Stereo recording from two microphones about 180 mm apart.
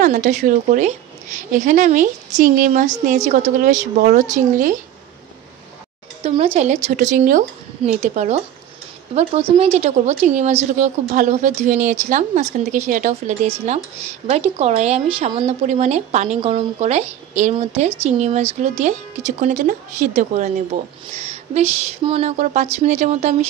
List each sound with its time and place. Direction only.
0.0 s a woman's voice: 40° right (ahead or behind)
6.2 s speech: 30° right (ahead or behind)
9.6 s a woman's voice: 35° right (ahead or behind)